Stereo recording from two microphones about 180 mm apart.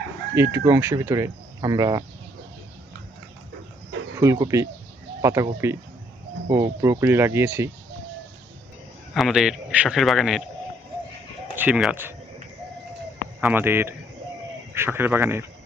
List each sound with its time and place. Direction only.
0.3 s speech: 15° right (ahead or behind)
4.2 s speech: 15° right (ahead or behind)
6.5 s speech: 15° right (ahead or behind)
9.1 s a man's voice: centre (ahead or behind)
11.5 s speech: 10° right (ahead or behind)
13.4 s speech: 10° right (ahead or behind)